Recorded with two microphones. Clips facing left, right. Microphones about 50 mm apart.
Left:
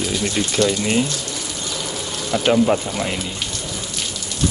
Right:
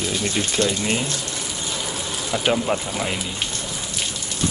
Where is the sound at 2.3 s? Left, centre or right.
Centre.